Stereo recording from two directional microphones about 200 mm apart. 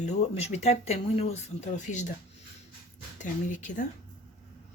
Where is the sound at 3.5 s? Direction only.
40° left (ahead or behind).